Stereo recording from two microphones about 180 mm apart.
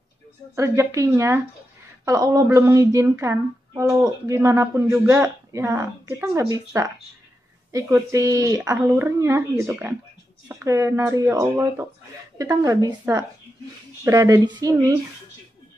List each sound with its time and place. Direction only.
0.6 s speech: 15° right (ahead or behind)